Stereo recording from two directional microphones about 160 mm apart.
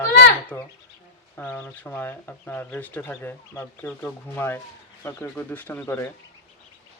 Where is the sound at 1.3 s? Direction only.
10° left (ahead or behind).